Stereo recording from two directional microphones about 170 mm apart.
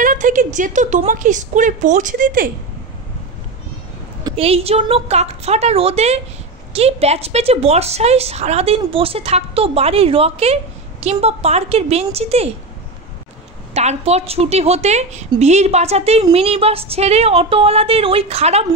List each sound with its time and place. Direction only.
0.0 s a woman's voice: 50° right (ahead or behind)
4.4 s speech: 35° right (ahead or behind)
13.7 s speech: 40° right (ahead or behind)